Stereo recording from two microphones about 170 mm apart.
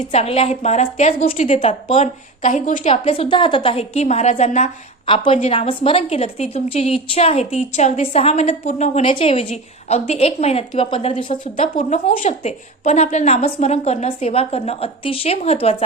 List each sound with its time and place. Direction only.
0.0 s a woman's voice: 40° left (ahead or behind)
2.9 s a woman's voice: 35° left (ahead or behind)
5.0 s a woman's voice: 30° left (ahead or behind)
11.8 s a woman's voice: 45° left (ahead or behind)